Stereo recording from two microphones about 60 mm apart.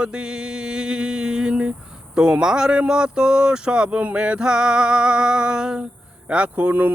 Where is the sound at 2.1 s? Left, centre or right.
Centre.